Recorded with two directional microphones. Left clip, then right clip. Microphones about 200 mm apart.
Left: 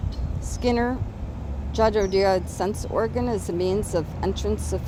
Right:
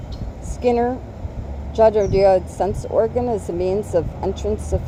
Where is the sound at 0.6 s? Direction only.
25° left (ahead or behind).